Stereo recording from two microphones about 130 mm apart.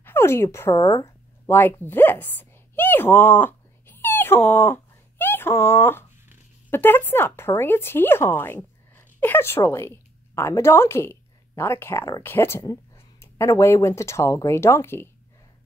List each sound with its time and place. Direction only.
0.0 s speech: 20° left (ahead or behind)
1.4 s a sound: 15° left (ahead or behind)
5.2 s speech: 15° left (ahead or behind)